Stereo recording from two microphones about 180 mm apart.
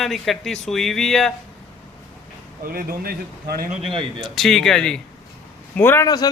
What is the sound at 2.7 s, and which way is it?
Speech, 55° right (ahead or behind).